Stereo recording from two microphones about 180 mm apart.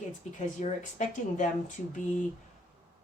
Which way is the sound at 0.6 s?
45° left (ahead or behind).